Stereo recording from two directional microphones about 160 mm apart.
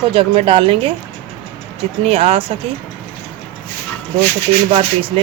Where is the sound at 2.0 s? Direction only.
40° right (ahead or behind).